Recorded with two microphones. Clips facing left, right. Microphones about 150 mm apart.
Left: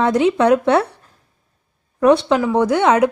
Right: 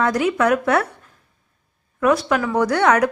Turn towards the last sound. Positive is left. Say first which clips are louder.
# left 2 dB
turn(degrees=20)  # may be behind; listen again after turning